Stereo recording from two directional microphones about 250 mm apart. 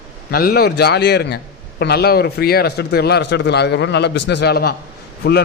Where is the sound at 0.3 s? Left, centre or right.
Left.